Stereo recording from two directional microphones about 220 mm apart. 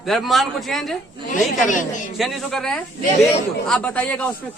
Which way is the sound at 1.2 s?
35° left (ahead or behind).